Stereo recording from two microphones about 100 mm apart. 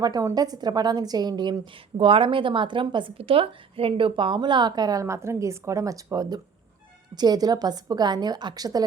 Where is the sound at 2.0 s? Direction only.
65° right (ahead or behind).